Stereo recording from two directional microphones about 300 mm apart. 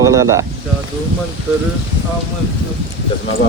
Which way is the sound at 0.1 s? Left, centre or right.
Centre.